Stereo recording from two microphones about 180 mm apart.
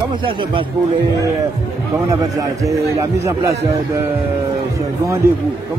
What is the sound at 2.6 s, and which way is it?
Speech, 15° right (ahead or behind).